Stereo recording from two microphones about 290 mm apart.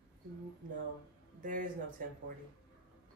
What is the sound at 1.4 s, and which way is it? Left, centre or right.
Speech, right.